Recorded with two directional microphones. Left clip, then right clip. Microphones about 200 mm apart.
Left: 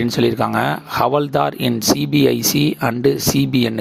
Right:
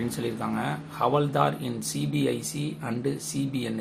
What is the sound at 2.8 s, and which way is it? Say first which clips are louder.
Speech: left 12 dB; 50° left (ahead or behind).